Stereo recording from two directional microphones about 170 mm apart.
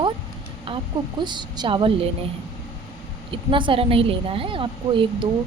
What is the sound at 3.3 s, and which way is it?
A woman's voice, 30° right (ahead or behind).